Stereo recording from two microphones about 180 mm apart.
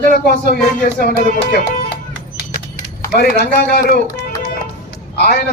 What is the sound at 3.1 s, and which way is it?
Speech, 65° left (ahead or behind).